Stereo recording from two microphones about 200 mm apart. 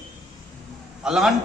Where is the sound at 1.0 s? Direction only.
5° right (ahead or behind).